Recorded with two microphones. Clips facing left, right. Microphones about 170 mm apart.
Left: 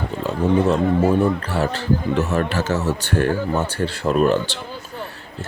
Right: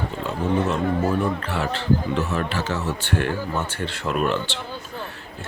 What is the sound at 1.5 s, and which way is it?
Speech, 40° left (ahead or behind).